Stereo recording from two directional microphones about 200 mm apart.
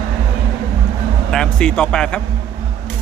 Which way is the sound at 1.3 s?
5° left (ahead or behind).